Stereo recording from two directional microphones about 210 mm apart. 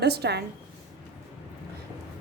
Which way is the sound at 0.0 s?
50° right (ahead or behind).